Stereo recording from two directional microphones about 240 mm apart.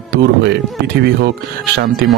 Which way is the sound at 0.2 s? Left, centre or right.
Right.